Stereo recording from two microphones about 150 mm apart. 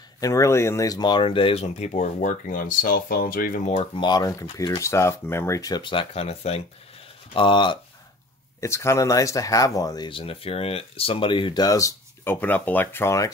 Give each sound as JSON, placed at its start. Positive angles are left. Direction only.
{"t": 0.2, "sound": "speech", "side_deg": 20}
{"t": 3.6, "sound": "speech", "side_deg": 45}
{"t": 4.0, "sound": "speech", "side_deg": 25}
{"t": 8.5, "sound": "speech", "side_deg": 20}